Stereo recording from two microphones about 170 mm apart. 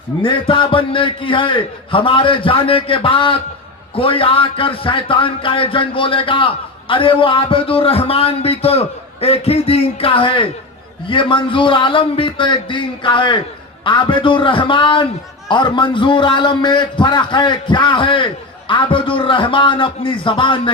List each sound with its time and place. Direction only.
0.2 s a man's voice: 30° left (ahead or behind)